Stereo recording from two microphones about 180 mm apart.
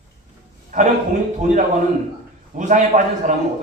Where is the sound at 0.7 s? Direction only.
40° right (ahead or behind).